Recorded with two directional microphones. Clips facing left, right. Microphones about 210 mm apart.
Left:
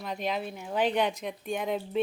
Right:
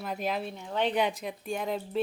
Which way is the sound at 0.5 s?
10° left (ahead or behind).